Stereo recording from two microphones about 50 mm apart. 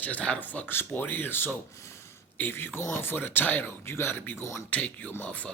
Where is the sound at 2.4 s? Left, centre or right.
Left.